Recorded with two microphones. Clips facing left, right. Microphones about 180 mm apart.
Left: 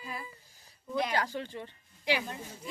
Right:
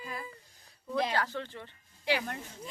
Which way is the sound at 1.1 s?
15° left (ahead or behind).